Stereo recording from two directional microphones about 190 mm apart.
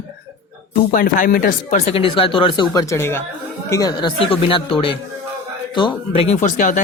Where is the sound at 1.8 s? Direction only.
30° left (ahead or behind).